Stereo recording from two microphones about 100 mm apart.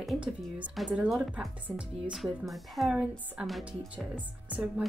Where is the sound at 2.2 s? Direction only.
Centre (ahead or behind).